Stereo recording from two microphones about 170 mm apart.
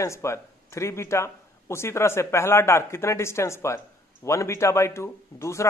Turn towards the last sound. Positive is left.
turn(degrees=15)  # may be behind; listen again after turning